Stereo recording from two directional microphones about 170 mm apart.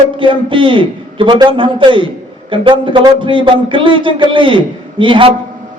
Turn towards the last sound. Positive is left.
turn(degrees=-30)  # may be behind; listen again after turning